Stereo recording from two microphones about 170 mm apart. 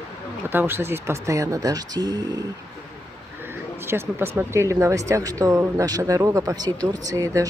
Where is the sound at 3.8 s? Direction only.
15° right (ahead or behind).